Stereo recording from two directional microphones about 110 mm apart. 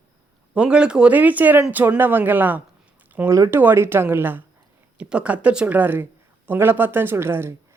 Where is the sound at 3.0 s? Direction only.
15° right (ahead or behind).